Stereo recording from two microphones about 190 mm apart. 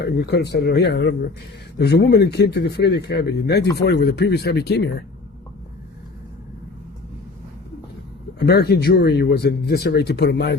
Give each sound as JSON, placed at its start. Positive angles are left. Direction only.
{"t": 0.0, "sound": "speech", "side_deg": 60}
{"t": 8.4, "sound": "speech", "side_deg": 55}